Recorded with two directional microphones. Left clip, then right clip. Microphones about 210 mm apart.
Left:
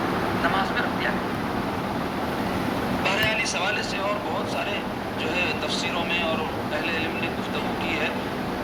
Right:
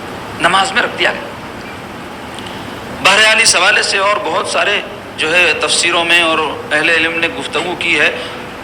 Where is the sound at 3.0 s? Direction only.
45° right (ahead or behind).